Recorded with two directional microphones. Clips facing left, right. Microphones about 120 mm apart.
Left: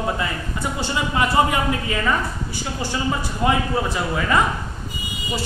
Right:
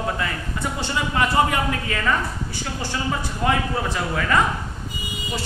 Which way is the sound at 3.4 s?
15° left (ahead or behind).